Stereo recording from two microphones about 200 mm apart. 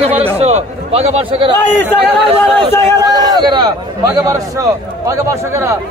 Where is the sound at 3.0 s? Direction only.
20° right (ahead or behind).